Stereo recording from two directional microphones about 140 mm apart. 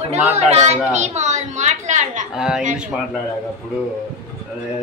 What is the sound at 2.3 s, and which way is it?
Speech, 5° right (ahead or behind).